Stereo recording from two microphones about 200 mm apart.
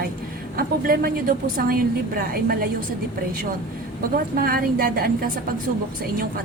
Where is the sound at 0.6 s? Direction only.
50° right (ahead or behind).